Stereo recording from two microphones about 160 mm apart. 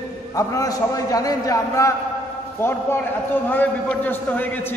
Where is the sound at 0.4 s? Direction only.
20° left (ahead or behind).